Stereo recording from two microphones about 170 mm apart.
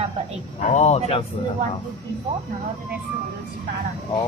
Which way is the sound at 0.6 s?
40° left (ahead or behind).